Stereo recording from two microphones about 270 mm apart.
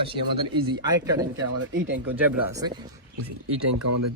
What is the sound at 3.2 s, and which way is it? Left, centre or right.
Speech, right.